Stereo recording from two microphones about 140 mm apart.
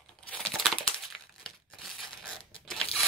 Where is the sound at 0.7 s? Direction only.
35° left (ahead or behind).